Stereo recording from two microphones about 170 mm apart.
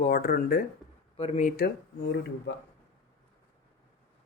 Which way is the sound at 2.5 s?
90° left.